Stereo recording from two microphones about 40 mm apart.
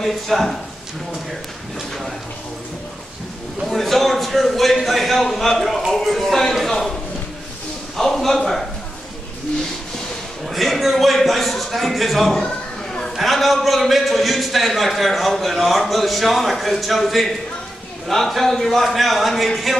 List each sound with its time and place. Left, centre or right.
0.0 s a man's voice: centre
3.6 s a man's voice: centre
7.9 s speech: centre
10.4 s a man's voice: centre
12.4 s a sound: centre
13.1 s a man's voice: centre